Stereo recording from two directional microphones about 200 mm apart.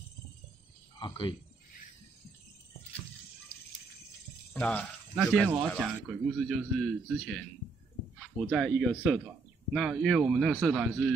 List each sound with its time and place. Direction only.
0.9 s a sound: 25° left (ahead or behind)
4.6 s speech: 5° left (ahead or behind)
5.1 s a man's voice: 10° right (ahead or behind)